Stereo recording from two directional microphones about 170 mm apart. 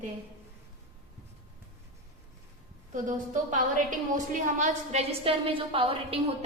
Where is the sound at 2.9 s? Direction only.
50° right (ahead or behind).